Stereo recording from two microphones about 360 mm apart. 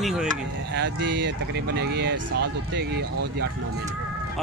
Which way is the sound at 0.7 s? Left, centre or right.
Right.